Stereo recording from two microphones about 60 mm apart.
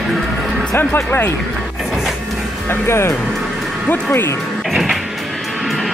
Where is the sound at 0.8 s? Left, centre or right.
Left.